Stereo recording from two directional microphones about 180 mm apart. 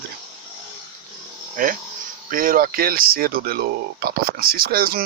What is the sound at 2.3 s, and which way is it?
Speech, 50° right (ahead or behind).